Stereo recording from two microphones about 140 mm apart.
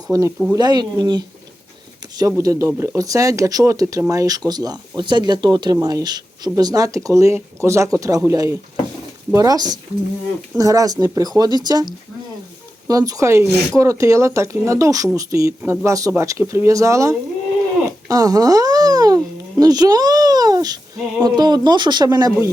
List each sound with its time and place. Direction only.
0.1 s a child's voice: 20° right (ahead or behind)